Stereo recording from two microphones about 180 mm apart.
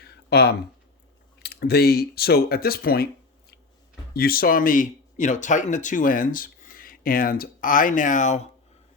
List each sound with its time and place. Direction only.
0.0 s a sound: 60° left (ahead or behind)
1.4 s speech: 65° left (ahead or behind)
4.1 s speech: 55° left (ahead or behind)